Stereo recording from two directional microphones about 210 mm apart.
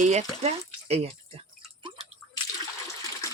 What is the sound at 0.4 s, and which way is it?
Drip, 30° right (ahead or behind).